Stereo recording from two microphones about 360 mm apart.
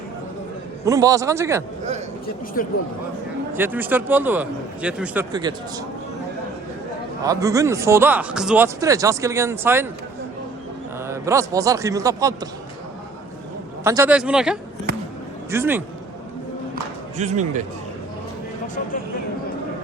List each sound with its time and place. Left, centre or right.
0.9 s speech: centre
3.5 s a man's voice: centre
7.2 s speech: centre
11.1 s speech: centre
13.8 s a man's voice: centre
17.2 s speech: centre